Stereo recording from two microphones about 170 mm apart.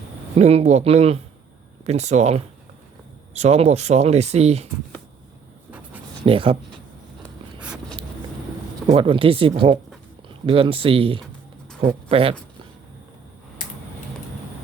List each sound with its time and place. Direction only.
0.3 s speech: 40° right (ahead or behind)
6.2 s speech: 35° right (ahead or behind)
8.9 s speech: 30° right (ahead or behind)